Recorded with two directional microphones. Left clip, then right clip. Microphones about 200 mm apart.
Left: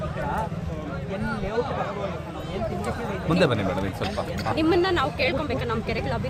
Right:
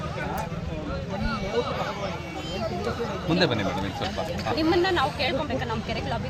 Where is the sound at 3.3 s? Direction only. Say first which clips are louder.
Left 2 dB; 55° left (ahead or behind).